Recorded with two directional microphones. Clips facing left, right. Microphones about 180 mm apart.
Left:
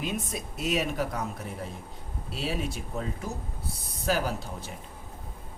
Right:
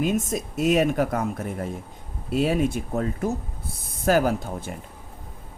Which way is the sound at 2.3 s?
50° right (ahead or behind).